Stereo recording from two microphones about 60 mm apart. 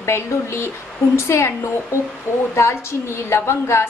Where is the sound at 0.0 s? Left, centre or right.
Left.